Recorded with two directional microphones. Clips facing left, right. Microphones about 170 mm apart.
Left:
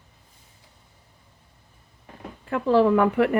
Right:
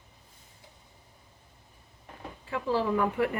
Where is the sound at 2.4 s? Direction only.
60° left (ahead or behind).